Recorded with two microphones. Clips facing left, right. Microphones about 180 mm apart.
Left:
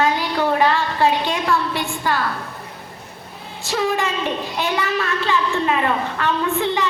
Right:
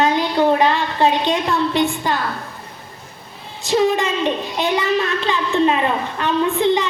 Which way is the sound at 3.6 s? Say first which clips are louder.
Right 4 dB; 20° right (ahead or behind).